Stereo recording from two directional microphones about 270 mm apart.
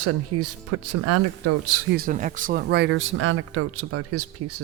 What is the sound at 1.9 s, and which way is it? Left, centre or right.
Speech, right.